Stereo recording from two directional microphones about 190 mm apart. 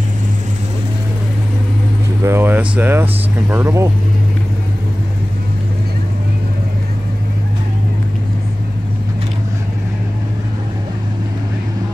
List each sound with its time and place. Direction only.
2.2 s speech: 10° right (ahead or behind)